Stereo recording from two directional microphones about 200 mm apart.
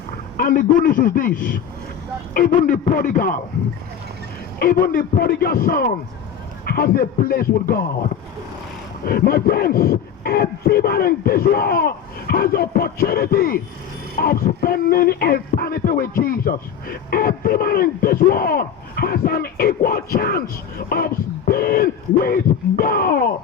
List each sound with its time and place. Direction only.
0.3 s speech: 45° left (ahead or behind)
4.6 s speech: 45° left (ahead or behind)
9.0 s speech: 50° left (ahead or behind)